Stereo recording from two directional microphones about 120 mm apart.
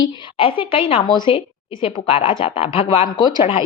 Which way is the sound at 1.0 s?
40° left (ahead or behind).